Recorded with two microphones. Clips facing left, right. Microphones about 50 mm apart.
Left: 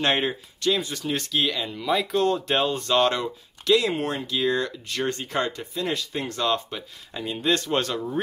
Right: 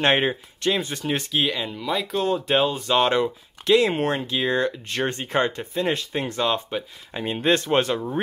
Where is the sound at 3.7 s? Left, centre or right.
Right.